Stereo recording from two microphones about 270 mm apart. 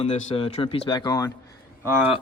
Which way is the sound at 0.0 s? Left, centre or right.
Left.